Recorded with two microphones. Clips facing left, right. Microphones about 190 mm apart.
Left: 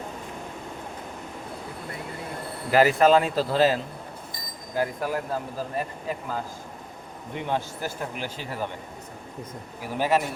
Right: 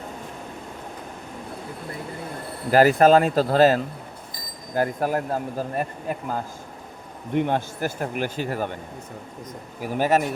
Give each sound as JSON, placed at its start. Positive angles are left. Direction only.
{"t": 2.7, "sound": "speech", "side_deg": -45}
{"t": 9.8, "sound": "speech", "side_deg": -50}